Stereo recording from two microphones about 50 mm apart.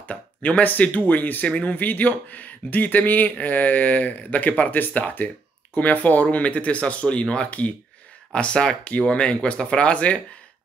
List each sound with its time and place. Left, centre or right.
0.1 s speech: left